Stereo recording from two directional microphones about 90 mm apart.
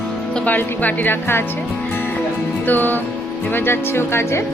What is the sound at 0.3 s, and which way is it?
Speech, 20° left (ahead or behind).